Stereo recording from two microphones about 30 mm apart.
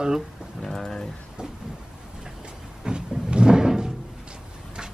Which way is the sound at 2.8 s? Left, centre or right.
Right.